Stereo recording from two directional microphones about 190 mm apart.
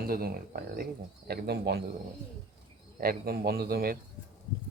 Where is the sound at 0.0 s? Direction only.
50° right (ahead or behind).